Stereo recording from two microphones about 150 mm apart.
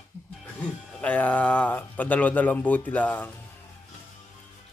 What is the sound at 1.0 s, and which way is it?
Speech, 10° left (ahead or behind).